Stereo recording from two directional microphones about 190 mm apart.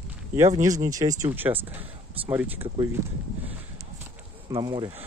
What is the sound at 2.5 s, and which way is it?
Speech, 30° right (ahead or behind).